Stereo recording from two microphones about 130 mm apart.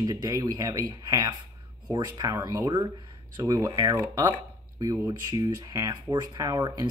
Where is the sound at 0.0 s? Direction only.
25° right (ahead or behind).